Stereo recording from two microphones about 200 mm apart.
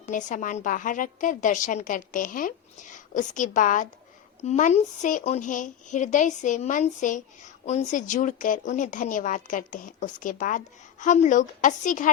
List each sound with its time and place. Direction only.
0.1 s a woman's voice: 40° left (ahead or behind)